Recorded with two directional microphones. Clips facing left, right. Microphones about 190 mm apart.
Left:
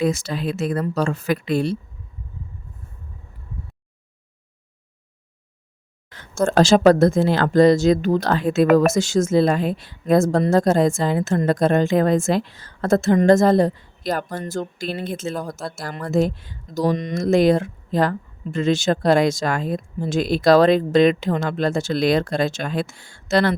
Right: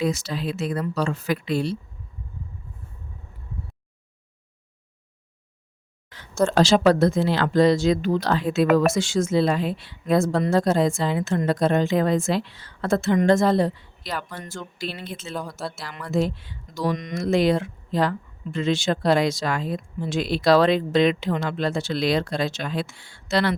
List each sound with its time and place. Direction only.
0.0 s speech: 50° left (ahead or behind)
6.1 s speech: 50° left (ahead or behind)